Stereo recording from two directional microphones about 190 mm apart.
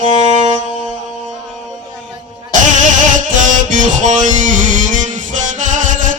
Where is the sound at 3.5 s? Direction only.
40° right (ahead or behind).